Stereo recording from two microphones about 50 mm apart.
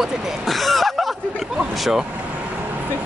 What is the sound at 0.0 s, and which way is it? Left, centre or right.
Speech, centre.